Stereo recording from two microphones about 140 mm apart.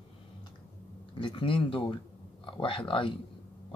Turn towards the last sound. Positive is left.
turn(degrees=40)  # may be behind; listen again after turning